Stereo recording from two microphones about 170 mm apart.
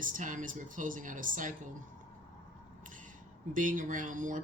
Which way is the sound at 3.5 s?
50° right (ahead or behind).